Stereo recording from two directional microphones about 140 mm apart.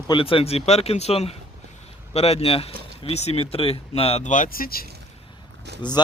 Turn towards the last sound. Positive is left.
turn(degrees=35)  # may be behind; listen again after turning